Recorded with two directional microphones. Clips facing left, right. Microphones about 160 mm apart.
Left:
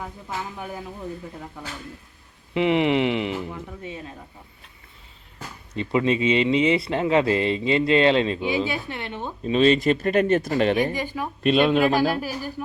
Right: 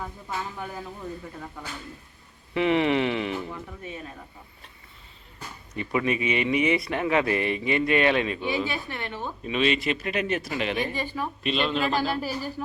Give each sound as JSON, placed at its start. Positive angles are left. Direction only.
{"t": 0.5, "sound": "speech", "side_deg": 15}
{"t": 2.6, "sound": "speech", "side_deg": 20}
{"t": 5.7, "sound": "speech", "side_deg": 25}
{"t": 9.4, "sound": "speech", "side_deg": 35}
{"t": 10.9, "sound": "speech", "side_deg": 15}
{"t": 11.4, "sound": "speech", "side_deg": 50}
{"t": 12.1, "sound": "speech", "side_deg": 10}